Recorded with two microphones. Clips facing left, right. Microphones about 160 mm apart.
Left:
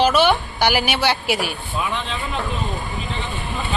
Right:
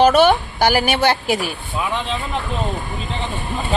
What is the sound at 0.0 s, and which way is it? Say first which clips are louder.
A woman's voice: right 4 dB; 50° right (ahead or behind).